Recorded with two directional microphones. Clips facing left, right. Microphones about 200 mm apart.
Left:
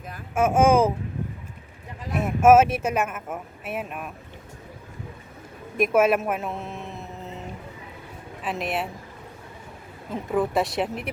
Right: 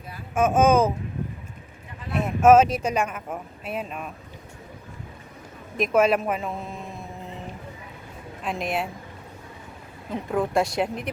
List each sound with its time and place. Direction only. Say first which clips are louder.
0.3 s speech: even; 10° left (ahead or behind)
2.1 s speech: even; 5° left (ahead or behind)
5.7 s speech: left 1 dB; 5° left (ahead or behind)
8.4 s speech: even; 5° left (ahead or behind)
10.1 s speech: left 1 dB; 5° left (ahead or behind)